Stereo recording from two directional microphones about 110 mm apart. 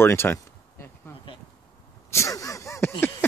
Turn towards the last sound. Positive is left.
turn(degrees=25)  # may be behind; listen again after turning